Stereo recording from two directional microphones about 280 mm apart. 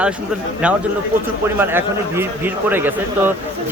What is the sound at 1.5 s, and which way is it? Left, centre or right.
Speech, centre.